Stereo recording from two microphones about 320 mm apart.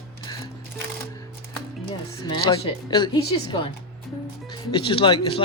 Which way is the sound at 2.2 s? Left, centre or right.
Centre.